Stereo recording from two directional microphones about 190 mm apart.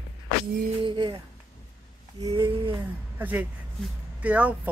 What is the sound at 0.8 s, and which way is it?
Speech, 25° right (ahead or behind).